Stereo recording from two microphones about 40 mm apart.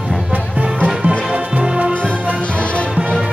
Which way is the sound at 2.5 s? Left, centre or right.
Left.